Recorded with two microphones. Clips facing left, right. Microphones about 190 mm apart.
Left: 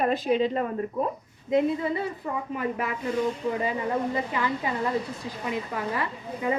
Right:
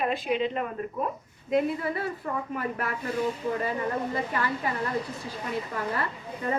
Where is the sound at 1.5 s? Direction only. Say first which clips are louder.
Left 2 dB; 20° left (ahead or behind).